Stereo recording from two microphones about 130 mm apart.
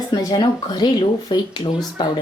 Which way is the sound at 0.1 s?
35° left (ahead or behind).